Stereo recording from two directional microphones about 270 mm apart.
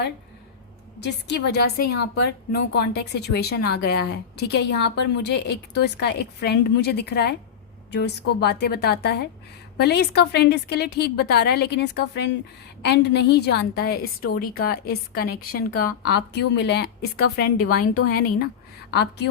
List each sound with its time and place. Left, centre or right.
0.9 s speech: left